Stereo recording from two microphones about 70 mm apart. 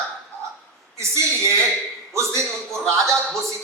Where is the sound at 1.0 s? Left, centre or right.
Right.